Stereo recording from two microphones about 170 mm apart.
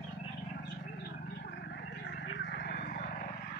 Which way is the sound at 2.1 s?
80° left.